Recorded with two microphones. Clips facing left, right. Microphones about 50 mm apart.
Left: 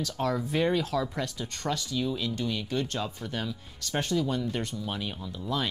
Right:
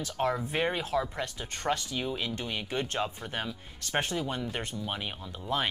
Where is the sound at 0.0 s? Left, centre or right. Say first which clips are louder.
Left 1 dB; right.